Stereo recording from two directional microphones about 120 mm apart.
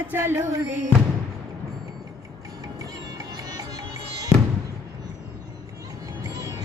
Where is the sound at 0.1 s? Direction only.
20° right (ahead or behind).